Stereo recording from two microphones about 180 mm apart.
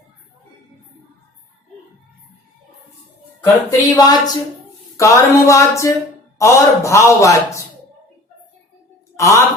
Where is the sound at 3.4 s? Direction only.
20° left (ahead or behind).